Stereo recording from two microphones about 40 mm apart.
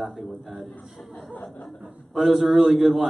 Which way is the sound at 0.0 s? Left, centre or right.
Centre.